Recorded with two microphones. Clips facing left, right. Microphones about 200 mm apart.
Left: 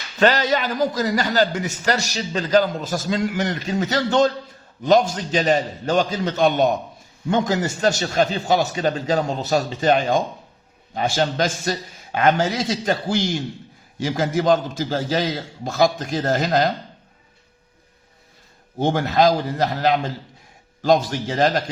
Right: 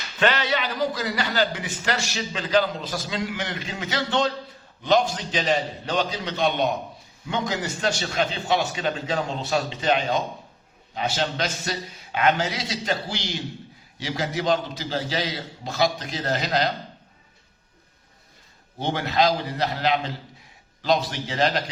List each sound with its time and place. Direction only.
0.2 s a man's voice: 40° left (ahead or behind)
18.8 s a man's voice: 45° left (ahead or behind)